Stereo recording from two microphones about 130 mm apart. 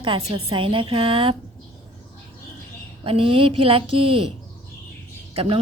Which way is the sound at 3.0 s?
45° right (ahead or behind).